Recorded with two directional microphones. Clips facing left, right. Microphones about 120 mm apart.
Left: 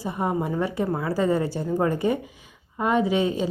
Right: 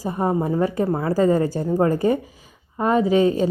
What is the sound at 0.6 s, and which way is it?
A woman's voice, 40° right (ahead or behind).